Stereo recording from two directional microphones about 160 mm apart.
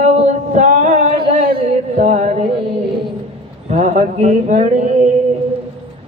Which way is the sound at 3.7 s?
50° right (ahead or behind).